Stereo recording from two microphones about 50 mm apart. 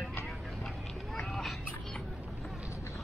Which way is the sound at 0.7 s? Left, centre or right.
Centre.